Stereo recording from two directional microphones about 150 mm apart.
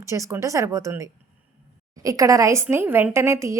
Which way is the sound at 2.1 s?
20° right (ahead or behind).